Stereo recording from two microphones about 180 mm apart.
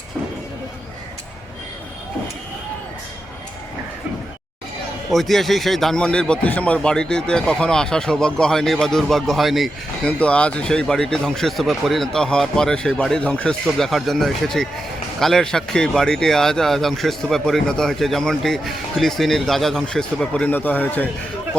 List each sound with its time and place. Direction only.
5.1 s a man's voice: centre (ahead or behind)